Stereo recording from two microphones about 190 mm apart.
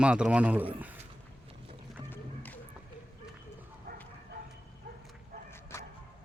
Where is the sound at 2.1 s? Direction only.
10° left (ahead or behind).